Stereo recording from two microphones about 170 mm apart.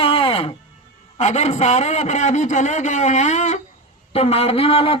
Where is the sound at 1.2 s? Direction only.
40° left (ahead or behind).